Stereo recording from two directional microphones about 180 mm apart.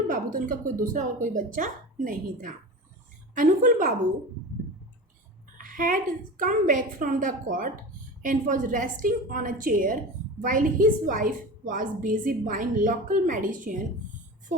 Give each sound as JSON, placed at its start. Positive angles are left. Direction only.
{"t": 0.1, "sound": "a woman's voice", "side_deg": -50}
{"t": 5.5, "sound": "a woman's voice", "side_deg": -50}